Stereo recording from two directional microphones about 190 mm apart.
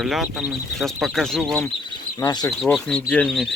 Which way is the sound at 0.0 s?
Centre (ahead or behind).